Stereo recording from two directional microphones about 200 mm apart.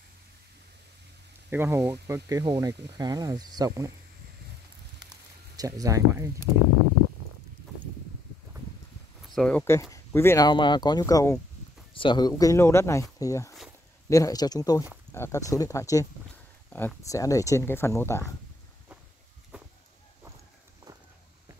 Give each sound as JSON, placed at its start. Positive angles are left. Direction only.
{"t": 1.5, "sound": "speech", "side_deg": -10}
{"t": 5.6, "sound": "speech", "side_deg": -15}
{"t": 9.3, "sound": "speech", "side_deg": 5}
{"t": 9.8, "sound": "speech", "side_deg": 15}
{"t": 19.5, "sound": "a sound", "side_deg": -5}